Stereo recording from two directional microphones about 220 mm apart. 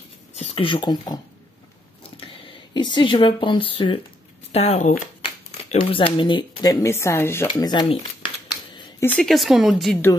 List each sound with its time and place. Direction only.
0.4 s speech: 25° left (ahead or behind)
9.0 s speech: 5° left (ahead or behind)